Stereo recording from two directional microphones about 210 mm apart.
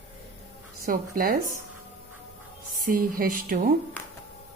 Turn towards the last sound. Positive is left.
turn(degrees=-40)  # may be behind; listen again after turning